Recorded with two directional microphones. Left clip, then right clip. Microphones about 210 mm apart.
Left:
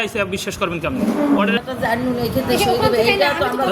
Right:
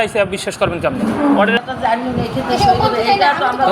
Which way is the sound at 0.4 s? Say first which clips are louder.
Right 5 dB; 25° left (ahead or behind).